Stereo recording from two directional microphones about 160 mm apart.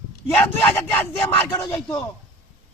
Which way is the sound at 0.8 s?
15° left (ahead or behind).